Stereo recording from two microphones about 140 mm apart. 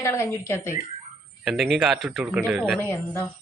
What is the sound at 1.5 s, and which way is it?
Speech, centre (ahead or behind).